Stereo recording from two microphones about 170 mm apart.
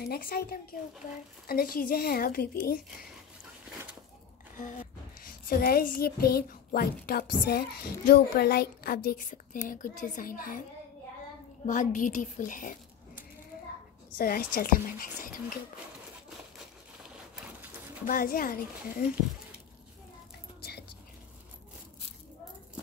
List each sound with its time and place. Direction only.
0.0 s speech: 65° left (ahead or behind)
5.2 s a woman's voice: 60° left (ahead or behind)
11.6 s a woman's voice: 50° left (ahead or behind)
14.1 s speech: 60° left (ahead or behind)
17.0 s a sound: 5° right (ahead or behind)
18.0 s speech: 55° left (ahead or behind)